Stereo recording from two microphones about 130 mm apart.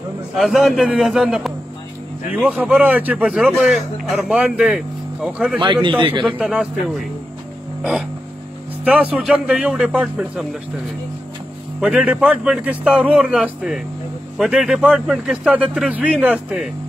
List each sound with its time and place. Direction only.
0.4 s a man's voice: 5° right (ahead or behind)
5.6 s a man's voice: 35° right (ahead or behind)
6.2 s a man's voice: 5° right (ahead or behind)
8.8 s a man's voice: 10° right (ahead or behind)
11.8 s a man's voice: 10° right (ahead or behind)